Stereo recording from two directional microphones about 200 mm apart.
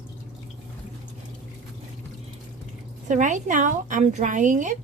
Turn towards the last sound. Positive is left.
turn(degrees=-40)  # may be behind; listen again after turning